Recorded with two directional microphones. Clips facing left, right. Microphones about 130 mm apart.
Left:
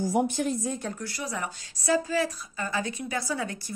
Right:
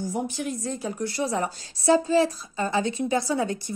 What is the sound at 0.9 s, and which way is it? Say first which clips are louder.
A woman's voice: right 8 dB; 25° right (ahead or behind).